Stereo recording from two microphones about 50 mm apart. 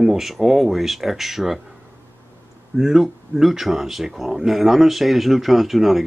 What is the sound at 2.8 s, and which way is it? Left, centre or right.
Speech, centre.